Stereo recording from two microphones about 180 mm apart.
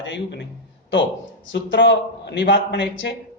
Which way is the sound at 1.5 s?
85° left.